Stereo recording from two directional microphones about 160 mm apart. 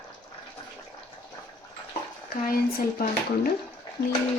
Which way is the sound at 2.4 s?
65° left (ahead or behind).